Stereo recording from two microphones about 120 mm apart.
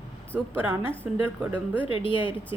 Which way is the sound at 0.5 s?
20° right (ahead or behind).